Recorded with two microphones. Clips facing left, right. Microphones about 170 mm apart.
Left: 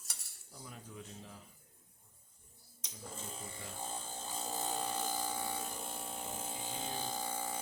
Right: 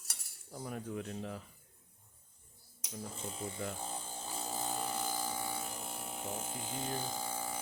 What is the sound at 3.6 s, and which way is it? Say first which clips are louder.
Speech: right 9 dB; 65° right (ahead or behind).